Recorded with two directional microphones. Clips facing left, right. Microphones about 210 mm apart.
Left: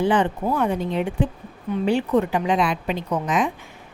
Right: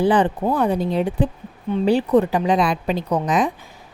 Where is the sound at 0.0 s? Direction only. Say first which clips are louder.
Right 3 dB; 35° right (ahead or behind).